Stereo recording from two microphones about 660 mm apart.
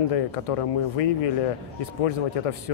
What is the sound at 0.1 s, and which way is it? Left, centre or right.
Speech, left.